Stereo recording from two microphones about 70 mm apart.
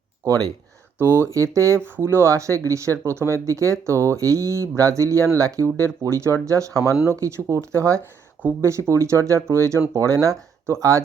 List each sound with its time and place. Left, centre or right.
0.9 s speech: right
1.3 s speech: right
2.0 s speech: right